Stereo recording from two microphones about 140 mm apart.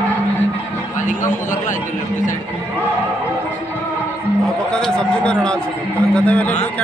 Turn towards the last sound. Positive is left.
turn(degrees=10)  # may be behind; listen again after turning